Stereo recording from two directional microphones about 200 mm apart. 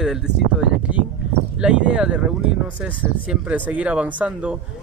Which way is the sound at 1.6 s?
5° right (ahead or behind).